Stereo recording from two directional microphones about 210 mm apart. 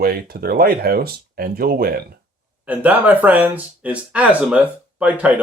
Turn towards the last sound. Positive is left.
turn(degrees=-5)  # may be behind; listen again after turning